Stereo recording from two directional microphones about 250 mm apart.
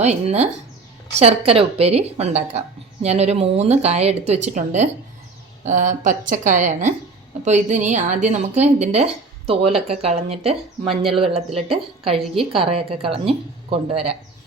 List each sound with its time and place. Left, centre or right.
0.0 s a woman's voice: right